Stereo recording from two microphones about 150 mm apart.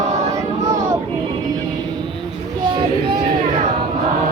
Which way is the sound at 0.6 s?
20° right (ahead or behind).